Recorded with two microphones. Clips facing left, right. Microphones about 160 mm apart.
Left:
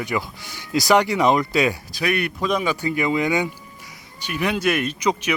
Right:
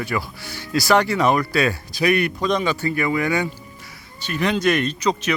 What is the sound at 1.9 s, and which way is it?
Speech, centre (ahead or behind).